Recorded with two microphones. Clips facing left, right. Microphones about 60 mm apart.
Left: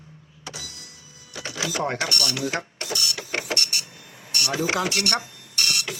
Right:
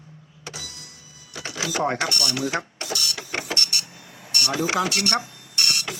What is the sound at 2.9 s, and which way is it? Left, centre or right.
Vehicle, centre.